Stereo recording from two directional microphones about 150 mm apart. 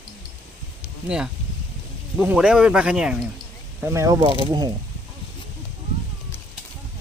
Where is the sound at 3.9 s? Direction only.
20° right (ahead or behind).